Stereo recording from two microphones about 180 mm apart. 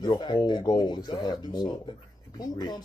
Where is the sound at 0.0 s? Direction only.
25° left (ahead or behind).